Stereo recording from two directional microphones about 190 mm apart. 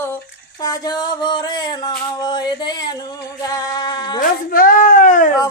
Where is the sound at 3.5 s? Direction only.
20° left (ahead or behind).